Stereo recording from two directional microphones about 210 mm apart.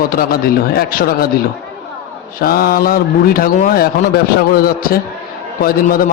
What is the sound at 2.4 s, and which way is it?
A man's voice, 45° left (ahead or behind).